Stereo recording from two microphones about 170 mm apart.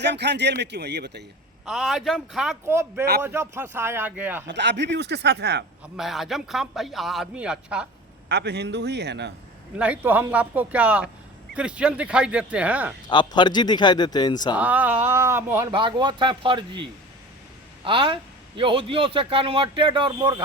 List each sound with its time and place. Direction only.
0.0 s speech: 85° right
1.6 s a man's voice: centre (ahead or behind)
2.6 s speech: 15° right (ahead or behind)
4.4 s speech: 90° right
6.0 s a man's voice: centre (ahead or behind)
8.3 s speech: 80° right
9.7 s speech: 5° right (ahead or behind)
13.1 s a man's voice: 25° left (ahead or behind)
14.5 s speech: 10° right (ahead or behind)
15.7 s speech: 25° right (ahead or behind)
17.8 s a man's voice: 30° right (ahead or behind)